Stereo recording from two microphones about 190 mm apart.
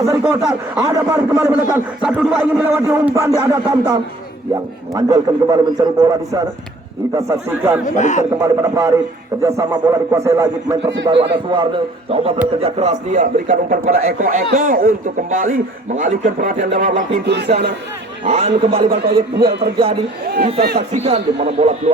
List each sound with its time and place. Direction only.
0.0 s a man's voice: 15° right (ahead or behind)
7.9 s a man's voice: 40° left (ahead or behind)
8.4 s a man's voice: 15° right (ahead or behind)
11.0 s a man's voice: 25° right (ahead or behind); by 16.9 s 50° right (ahead or behind)
17.2 s speech: 60° right (ahead or behind)
18.3 s a man's voice: 35° right (ahead or behind)
19.0 s speech: 55° right (ahead or behind)
20.7 s a man's voice: 35° right (ahead or behind)